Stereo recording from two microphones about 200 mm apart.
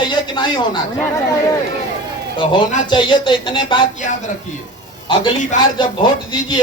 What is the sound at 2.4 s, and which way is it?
Speech, 25° left (ahead or behind).